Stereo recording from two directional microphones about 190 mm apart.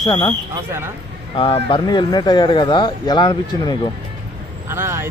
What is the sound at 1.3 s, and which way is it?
Speech, 30° left (ahead or behind).